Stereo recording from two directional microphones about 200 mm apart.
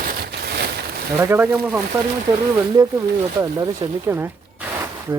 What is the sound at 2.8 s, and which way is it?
Speech, 20° right (ahead or behind).